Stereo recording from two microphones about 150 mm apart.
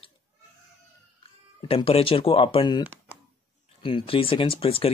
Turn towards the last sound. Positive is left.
turn(degrees=40)  # may be behind; listen again after turning